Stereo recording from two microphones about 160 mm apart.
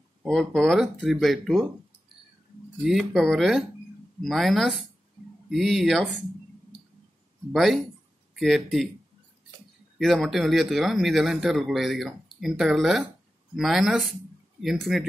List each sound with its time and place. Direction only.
0.2 s speech: centre (ahead or behind)
2.8 s speech: centre (ahead or behind)
7.5 s speech: centre (ahead or behind)
9.9 s speech: centre (ahead or behind)